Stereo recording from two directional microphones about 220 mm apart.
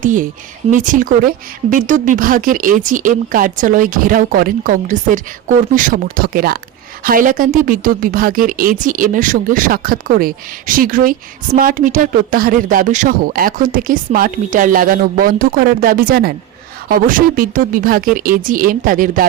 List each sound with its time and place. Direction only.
0.0 s speech: 35° right (ahead or behind)